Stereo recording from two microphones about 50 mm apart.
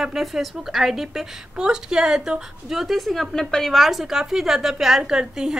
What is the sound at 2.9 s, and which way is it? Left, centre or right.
A woman's voice, centre.